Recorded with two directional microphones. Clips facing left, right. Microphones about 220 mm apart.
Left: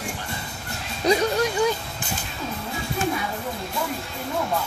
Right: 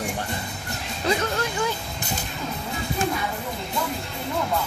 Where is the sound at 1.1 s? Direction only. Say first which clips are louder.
Left 4 dB; 15° left (ahead or behind).